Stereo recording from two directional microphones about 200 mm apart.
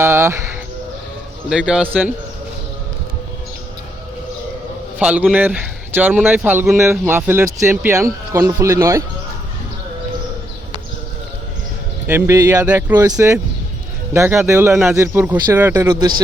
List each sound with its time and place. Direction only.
0.0 s speech: 15° right (ahead or behind)
1.5 s speech: 5° right (ahead or behind)
4.9 s speech: 5° right (ahead or behind)
12.0 s speech: 10° right (ahead or behind)